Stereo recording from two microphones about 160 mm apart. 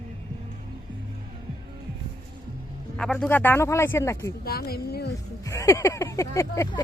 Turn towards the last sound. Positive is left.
turn(degrees=20)  # may be behind; listen again after turning